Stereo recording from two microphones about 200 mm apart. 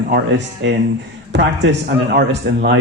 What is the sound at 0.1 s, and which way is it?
Speech, 60° right (ahead or behind).